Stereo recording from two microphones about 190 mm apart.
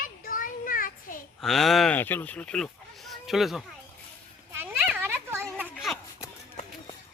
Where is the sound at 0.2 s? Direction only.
45° left (ahead or behind).